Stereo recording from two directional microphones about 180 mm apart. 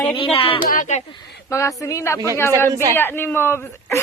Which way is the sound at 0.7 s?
45° left (ahead or behind).